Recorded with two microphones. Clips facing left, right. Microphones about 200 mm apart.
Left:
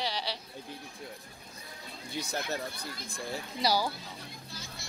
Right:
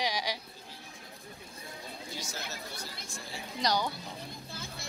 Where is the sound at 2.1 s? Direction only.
60° left (ahead or behind).